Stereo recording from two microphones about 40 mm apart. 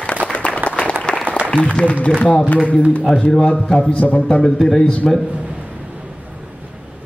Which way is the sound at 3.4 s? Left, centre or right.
Left.